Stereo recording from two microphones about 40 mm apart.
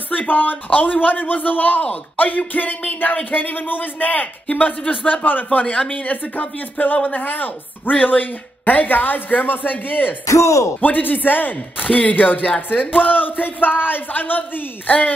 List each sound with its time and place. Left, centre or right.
0.1 s a man's voice: left
4.5 s a man's voice: left